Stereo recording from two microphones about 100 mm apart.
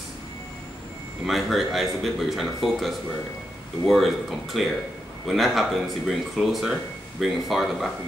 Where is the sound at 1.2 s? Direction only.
Centre (ahead or behind).